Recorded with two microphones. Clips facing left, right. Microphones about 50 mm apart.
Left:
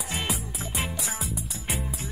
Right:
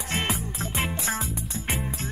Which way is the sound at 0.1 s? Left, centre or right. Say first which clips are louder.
Right 4 dB; right.